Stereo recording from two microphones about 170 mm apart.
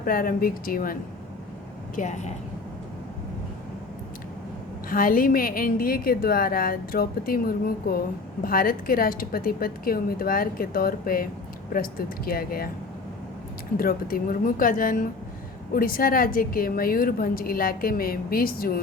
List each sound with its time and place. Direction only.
0.0 s a woman's voice: 55° left (ahead or behind)
2.0 s a woman's voice: 45° left (ahead or behind)
4.9 s a woman's voice: 55° left (ahead or behind)
13.7 s a woman's voice: 60° left (ahead or behind)